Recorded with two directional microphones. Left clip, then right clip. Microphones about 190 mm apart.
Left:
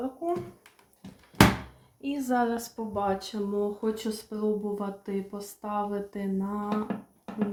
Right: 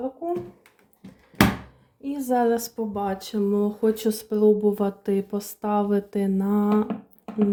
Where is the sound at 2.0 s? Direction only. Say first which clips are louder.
Right 4 dB; 10° right (ahead or behind).